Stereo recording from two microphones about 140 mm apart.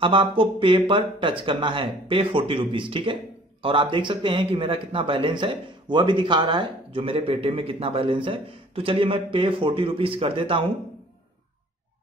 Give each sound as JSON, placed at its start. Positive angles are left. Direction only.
{"t": 0.0, "sound": "speech", "side_deg": -40}